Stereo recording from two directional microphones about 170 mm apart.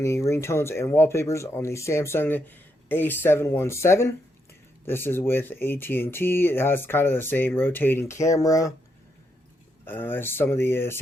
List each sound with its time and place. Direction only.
0.0 s speech: 15° left (ahead or behind)
9.8 s speech: 10° left (ahead or behind)